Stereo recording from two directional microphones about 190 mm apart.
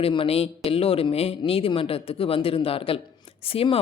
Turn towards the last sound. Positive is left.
turn(degrees=30)  # may be behind; listen again after turning